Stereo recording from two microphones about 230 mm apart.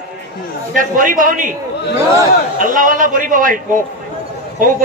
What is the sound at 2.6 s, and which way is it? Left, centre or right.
A man's voice, right.